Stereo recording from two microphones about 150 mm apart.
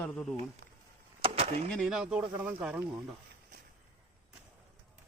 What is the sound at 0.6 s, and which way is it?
Chop, 90° right.